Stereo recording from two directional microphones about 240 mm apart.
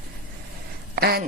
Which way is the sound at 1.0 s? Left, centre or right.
Right.